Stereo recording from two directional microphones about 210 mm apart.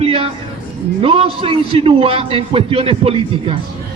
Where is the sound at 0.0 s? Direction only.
25° right (ahead or behind).